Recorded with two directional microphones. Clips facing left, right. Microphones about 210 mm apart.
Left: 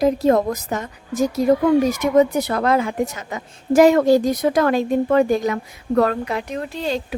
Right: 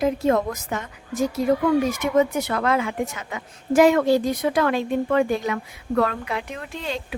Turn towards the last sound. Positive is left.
turn(degrees=35)  # may be behind; listen again after turning